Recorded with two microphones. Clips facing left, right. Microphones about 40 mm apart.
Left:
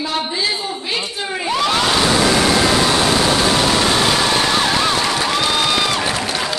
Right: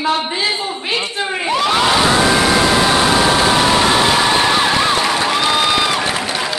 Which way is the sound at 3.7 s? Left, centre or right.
Centre.